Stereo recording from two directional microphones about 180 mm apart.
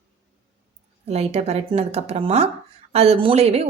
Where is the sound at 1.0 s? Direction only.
35° right (ahead or behind).